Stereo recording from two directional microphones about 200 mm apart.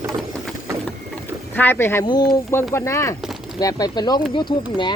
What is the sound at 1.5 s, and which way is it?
Speech, 10° left (ahead or behind).